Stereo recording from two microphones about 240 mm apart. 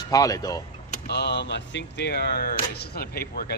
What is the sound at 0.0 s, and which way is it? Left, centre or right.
Speech, centre.